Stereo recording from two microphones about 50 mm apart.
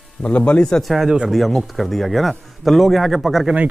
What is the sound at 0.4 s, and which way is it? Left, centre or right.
Speech, centre.